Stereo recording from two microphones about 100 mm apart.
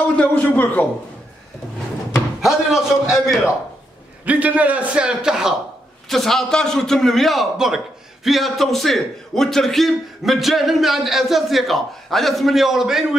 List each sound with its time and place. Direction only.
0.1 s a man's voice: 15° left (ahead or behind)
2.4 s a man's voice: 5° right (ahead or behind)
4.2 s a man's voice: 15° right (ahead or behind)